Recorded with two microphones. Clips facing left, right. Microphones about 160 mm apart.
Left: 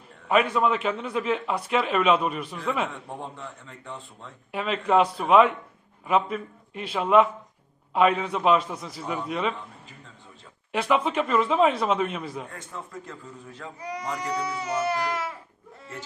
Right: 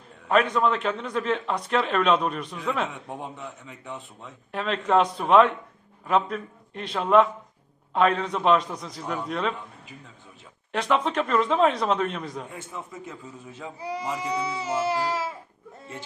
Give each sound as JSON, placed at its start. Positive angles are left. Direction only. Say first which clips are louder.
{"t": 0.3, "sound": "a man's voice", "louder": "even", "side_deg": 5}
{"t": 3.2, "sound": "a man's voice", "louder": "right 1 dB", "side_deg": -15}
{"t": 4.5, "sound": "a man's voice", "louder": "even", "side_deg": 5}
{"t": 10.7, "sound": "a man's voice", "louder": "even", "side_deg": 5}
{"t": 14.1, "sound": "speech", "louder": "even", "side_deg": -25}